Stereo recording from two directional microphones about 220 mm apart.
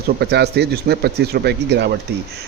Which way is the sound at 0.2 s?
50° right (ahead or behind).